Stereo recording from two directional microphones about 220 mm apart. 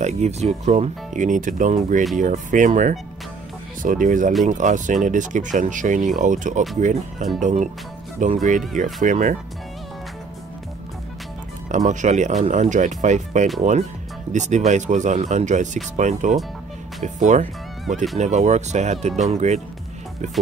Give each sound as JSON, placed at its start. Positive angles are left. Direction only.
{"t": 0.0, "sound": "speech", "side_deg": -30}
{"t": 11.7, "sound": "speech", "side_deg": -35}